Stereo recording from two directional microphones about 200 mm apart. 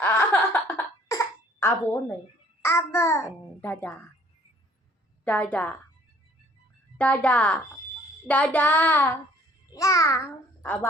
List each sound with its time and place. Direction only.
0.0 s a sound: 10° left (ahead or behind)
2.6 s a child's voice: 15° left (ahead or behind)
5.2 s a child's voice: 5° left (ahead or behind)
7.0 s a child's voice: 5° left (ahead or behind)